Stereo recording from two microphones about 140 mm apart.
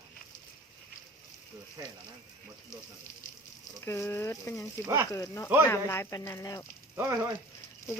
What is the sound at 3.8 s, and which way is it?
Speech, 20° left (ahead or behind).